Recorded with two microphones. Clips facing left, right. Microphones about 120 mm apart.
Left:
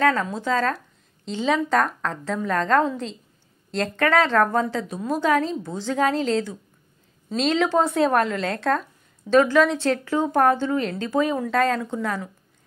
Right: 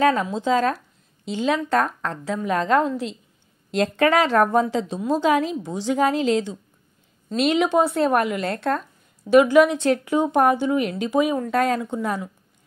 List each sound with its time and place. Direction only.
0.0 s a woman's voice: 20° right (ahead or behind)
7.8 s a woman's voice: 5° right (ahead or behind)
9.2 s speech: 15° right (ahead or behind)